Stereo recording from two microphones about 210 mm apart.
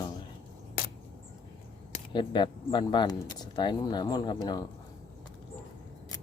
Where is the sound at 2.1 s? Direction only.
20° left (ahead or behind).